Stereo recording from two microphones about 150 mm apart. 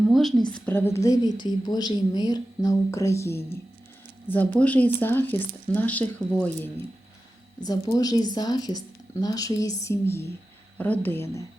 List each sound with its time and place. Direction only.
0.1 s a sound: centre (ahead or behind)
0.5 s a woman's voice: 10° left (ahead or behind)
7.6 s a woman's voice: 25° left (ahead or behind)